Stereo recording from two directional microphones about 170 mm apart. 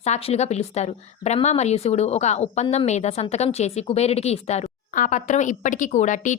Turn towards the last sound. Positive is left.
turn(degrees=45)  # may be behind; listen again after turning